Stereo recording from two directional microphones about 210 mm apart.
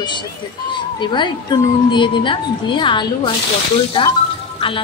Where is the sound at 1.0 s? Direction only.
20° left (ahead or behind).